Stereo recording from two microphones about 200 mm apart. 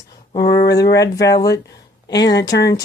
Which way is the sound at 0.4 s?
50° left (ahead or behind).